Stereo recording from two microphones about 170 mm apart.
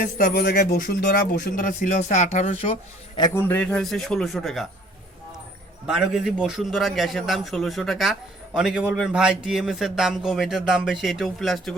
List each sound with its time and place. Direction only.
0.0 s speech: 55° left (ahead or behind)
3.2 s a man's voice: 25° left (ahead or behind)
3.4 s a man's voice: 10° left (ahead or behind)
5.8 s a man's voice: 5° right (ahead or behind)